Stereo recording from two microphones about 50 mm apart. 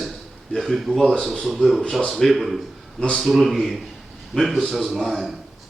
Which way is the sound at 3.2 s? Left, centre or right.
Centre.